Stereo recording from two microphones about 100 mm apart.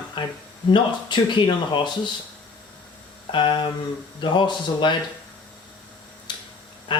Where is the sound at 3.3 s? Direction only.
55° left (ahead or behind).